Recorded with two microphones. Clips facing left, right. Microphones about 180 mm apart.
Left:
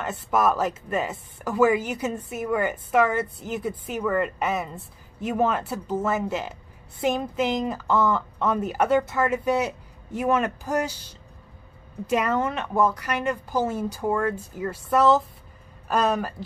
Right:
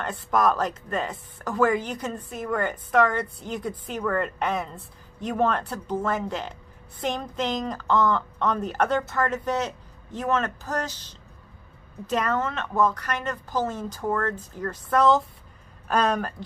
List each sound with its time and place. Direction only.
0.0 s a woman's voice: 5° left (ahead or behind)